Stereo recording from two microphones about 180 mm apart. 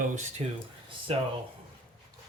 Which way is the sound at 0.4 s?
40° right (ahead or behind).